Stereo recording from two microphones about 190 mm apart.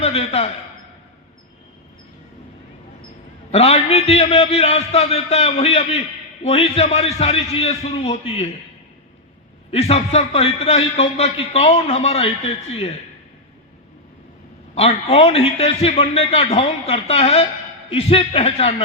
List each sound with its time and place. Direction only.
0.0 s a man's voice: 30° left (ahead or behind)
3.5 s a man's voice: 35° left (ahead or behind)
9.7 s a man's voice: 35° left (ahead or behind)
14.8 s a man's voice: 30° left (ahead or behind)